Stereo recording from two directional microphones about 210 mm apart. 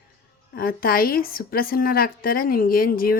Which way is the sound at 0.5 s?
45° left (ahead or behind).